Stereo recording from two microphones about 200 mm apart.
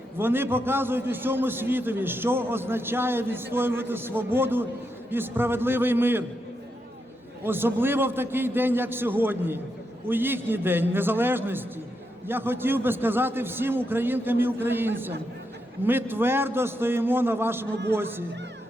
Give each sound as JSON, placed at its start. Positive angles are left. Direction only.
{"t": 0.2, "sound": "a man's voice", "side_deg": -10}
{"t": 7.4, "sound": "a man's voice", "side_deg": -10}